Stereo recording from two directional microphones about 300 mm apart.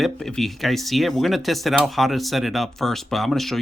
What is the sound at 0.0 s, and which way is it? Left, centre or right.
Speech, centre.